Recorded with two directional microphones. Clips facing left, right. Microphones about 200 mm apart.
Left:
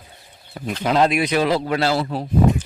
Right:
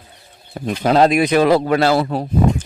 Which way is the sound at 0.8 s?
40° right (ahead or behind).